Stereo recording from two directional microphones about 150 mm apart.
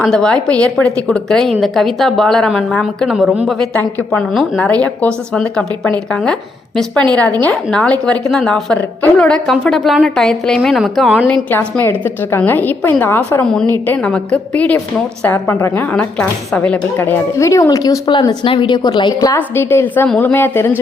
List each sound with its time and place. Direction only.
0.0 s a woman's voice: 5° left (ahead or behind)
11.5 s a woman's voice: 15° left (ahead or behind)
19.4 s a woman's voice: 15° left (ahead or behind)